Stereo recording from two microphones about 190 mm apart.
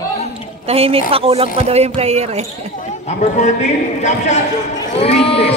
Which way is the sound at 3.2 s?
35° left (ahead or behind).